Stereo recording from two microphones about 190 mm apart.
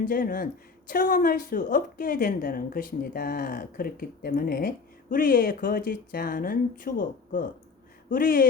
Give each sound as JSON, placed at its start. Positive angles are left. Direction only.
{"t": 0.0, "sound": "speech", "side_deg": 45}
{"t": 8.1, "sound": "speech", "side_deg": 45}